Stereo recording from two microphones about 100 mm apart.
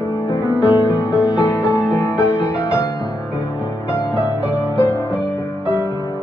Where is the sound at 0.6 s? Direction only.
15° right (ahead or behind).